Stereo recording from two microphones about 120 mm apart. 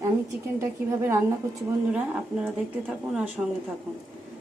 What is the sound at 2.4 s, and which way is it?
A woman's voice, 5° right (ahead or behind).